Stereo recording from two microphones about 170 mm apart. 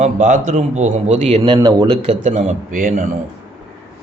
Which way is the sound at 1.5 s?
25° right (ahead or behind).